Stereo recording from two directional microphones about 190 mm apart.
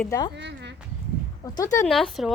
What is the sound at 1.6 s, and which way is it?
Speech, 15° left (ahead or behind).